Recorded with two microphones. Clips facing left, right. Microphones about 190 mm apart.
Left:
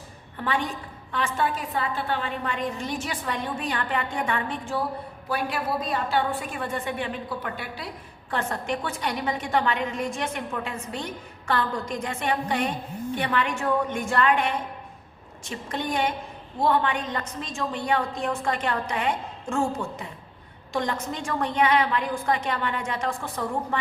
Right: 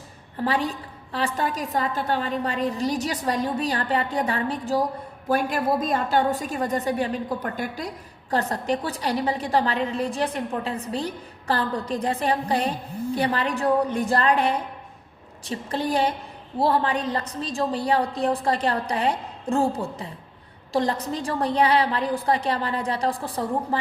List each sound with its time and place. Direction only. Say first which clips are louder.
0.3 s a woman's voice: right 3 dB; 35° right (ahead or behind)